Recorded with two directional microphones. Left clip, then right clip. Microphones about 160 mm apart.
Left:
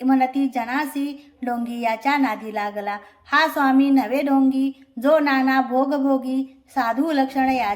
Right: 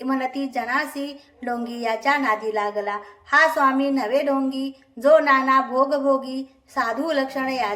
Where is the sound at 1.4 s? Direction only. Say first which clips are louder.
Left 2 dB; 35° left (ahead or behind).